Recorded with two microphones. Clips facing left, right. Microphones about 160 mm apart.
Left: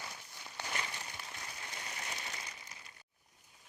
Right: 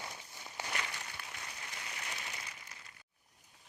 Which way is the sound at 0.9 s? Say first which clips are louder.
Even; 20° left (ahead or behind).